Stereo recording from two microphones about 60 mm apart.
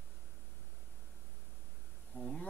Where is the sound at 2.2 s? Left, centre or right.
Centre.